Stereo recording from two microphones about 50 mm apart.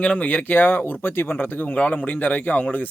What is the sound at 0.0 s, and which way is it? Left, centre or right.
Speech, left.